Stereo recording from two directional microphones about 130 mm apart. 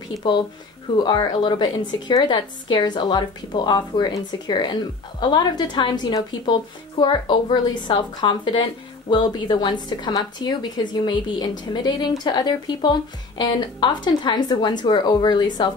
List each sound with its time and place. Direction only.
0.9 s a woman's voice: 35° left (ahead or behind)